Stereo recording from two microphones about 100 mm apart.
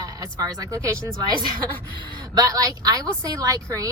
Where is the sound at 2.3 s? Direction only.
40° right (ahead or behind).